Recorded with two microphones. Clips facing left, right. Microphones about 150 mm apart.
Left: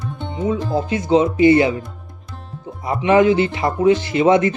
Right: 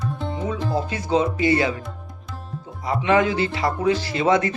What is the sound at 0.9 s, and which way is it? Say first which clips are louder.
Speech: left 8 dB; 25° left (ahead or behind).